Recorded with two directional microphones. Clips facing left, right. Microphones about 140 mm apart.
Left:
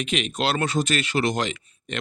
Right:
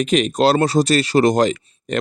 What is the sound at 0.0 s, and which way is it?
Speech, 40° right (ahead or behind).